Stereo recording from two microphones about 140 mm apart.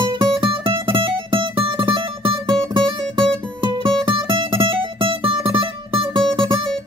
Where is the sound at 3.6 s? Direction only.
35° right (ahead or behind).